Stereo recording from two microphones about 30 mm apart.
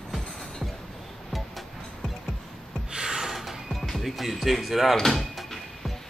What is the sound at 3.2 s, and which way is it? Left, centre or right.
Music, centre.